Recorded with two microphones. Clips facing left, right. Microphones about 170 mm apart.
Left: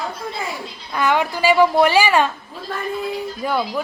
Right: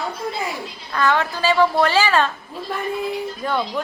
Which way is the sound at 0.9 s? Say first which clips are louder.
Left 1 dB; 15° left (ahead or behind).